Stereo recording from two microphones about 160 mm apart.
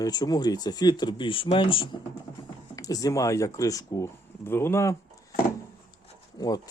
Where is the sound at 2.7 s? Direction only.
20° left (ahead or behind).